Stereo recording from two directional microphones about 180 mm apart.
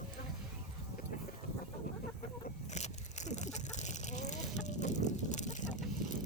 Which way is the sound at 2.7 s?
40° left (ahead or behind).